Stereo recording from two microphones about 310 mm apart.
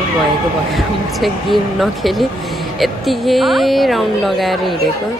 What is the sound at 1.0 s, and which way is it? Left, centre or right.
Speech, centre.